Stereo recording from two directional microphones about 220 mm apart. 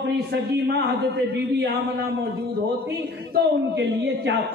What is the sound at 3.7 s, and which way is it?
Speech, 50° right (ahead or behind).